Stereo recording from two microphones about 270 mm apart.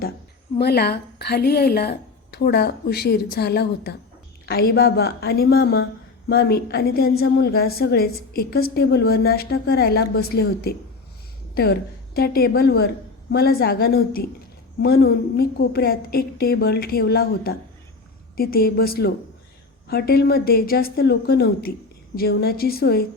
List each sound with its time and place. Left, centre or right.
0.6 s a woman's voice: left